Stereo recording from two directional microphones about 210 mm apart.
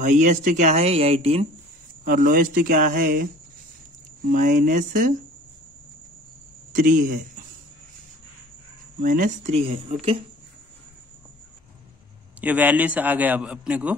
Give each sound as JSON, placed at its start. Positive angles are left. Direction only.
{"t": 0.0, "sound": "speech", "side_deg": -35}
{"t": 2.0, "sound": "speech", "side_deg": -40}
{"t": 4.3, "sound": "speech", "side_deg": -40}
{"t": 6.7, "sound": "speech", "side_deg": -40}
{"t": 9.0, "sound": "speech", "side_deg": -40}
{"t": 12.4, "sound": "a man's voice", "side_deg": -5}